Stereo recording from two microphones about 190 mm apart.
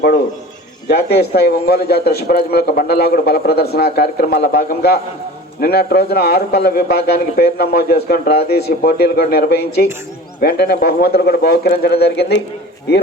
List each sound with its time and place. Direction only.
0.9 s a man's voice: 60° left (ahead or behind)